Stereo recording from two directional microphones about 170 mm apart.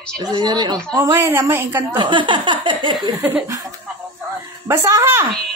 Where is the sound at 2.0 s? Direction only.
30° right (ahead or behind).